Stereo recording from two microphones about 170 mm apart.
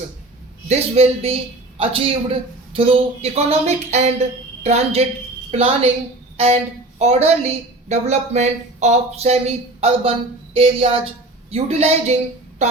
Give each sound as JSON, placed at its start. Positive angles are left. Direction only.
{"t": 0.7, "sound": "a woman's voice", "side_deg": -40}
{"t": 6.3, "sound": "a sound", "side_deg": -35}
{"t": 7.0, "sound": "a woman's voice", "side_deg": -40}